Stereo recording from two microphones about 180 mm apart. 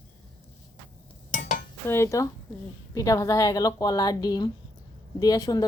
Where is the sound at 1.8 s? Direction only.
15° left (ahead or behind).